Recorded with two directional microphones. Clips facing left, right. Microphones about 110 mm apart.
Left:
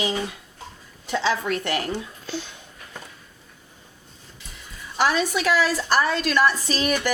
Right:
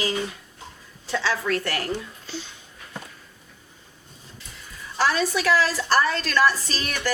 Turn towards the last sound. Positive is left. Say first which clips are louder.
# left 5 dB
turn(degrees=15)  # may be behind; listen again after turning